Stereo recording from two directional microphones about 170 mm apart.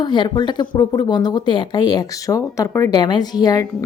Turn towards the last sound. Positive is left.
turn(degrees=25)  # may be behind; listen again after turning